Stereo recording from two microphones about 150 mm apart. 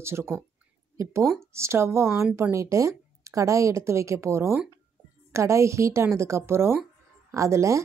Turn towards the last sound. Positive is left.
turn(degrees=-20)  # may be behind; listen again after turning